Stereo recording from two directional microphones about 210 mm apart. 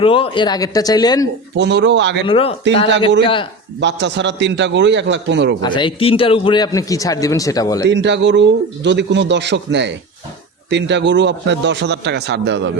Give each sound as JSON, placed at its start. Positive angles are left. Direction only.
{"t": 0.0, "sound": "speech", "side_deg": 25}
{"t": 1.5, "sound": "a man's voice", "side_deg": -55}
{"t": 2.2, "sound": "speech", "side_deg": 25}
{"t": 3.8, "sound": "a man's voice", "side_deg": -55}
{"t": 5.6, "sound": "a man's voice", "side_deg": 20}
{"t": 7.9, "sound": "a man's voice", "side_deg": -55}